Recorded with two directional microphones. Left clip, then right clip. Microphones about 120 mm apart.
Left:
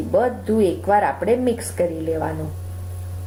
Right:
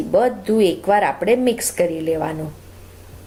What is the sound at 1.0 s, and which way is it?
Speech, 35° right (ahead or behind).